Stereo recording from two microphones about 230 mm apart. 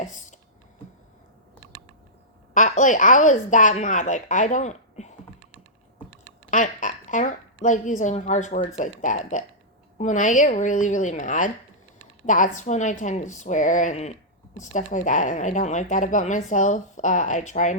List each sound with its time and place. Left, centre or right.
0.0 s a sound: left
2.5 s speech: left
6.5 s a woman's voice: left